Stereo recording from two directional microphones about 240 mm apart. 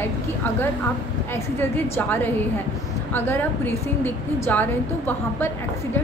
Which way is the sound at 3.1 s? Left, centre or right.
Centre.